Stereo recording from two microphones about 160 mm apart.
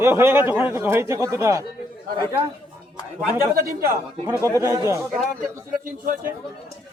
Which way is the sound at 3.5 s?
65° right (ahead or behind).